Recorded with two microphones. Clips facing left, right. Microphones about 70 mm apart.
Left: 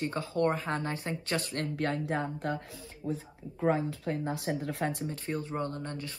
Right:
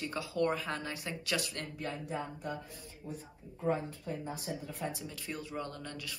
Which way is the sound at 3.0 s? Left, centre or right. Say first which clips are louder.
Left 9 dB; left.